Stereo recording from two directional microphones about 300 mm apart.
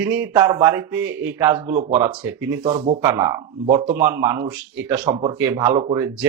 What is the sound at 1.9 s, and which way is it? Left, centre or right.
Speech, centre.